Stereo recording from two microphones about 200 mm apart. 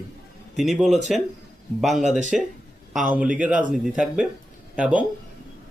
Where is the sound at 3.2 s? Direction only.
5° right (ahead or behind).